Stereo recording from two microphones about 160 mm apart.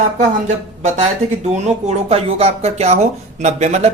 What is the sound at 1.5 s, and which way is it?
Speech, 45° right (ahead or behind).